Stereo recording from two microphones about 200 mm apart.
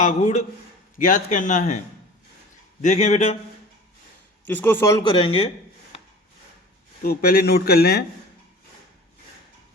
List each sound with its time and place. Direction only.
0.0 s a man's voice: 35° left (ahead or behind)
2.8 s a man's voice: 35° left (ahead or behind)
4.4 s a man's voice: 10° left (ahead or behind)
5.0 s speech: 30° left (ahead or behind)
7.0 s speech: 45° left (ahead or behind)